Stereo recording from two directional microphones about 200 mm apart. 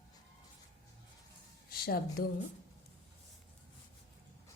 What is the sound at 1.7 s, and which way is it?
Speech, 50° left (ahead or behind).